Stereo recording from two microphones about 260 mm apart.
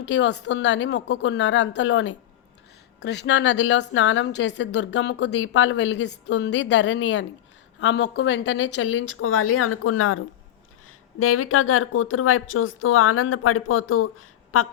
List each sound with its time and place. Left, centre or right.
0.1 s a woman's voice: left